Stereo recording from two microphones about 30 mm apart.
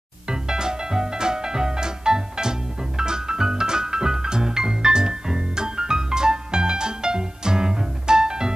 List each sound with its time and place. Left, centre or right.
0.3 s music: right